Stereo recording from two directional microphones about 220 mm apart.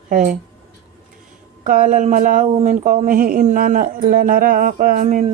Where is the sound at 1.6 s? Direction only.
35° right (ahead or behind).